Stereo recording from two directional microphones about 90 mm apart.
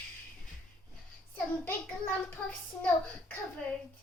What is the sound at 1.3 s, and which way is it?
A child's voice, 20° left (ahead or behind).